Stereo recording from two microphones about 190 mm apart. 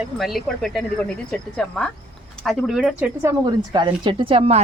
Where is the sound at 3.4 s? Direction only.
25° right (ahead or behind).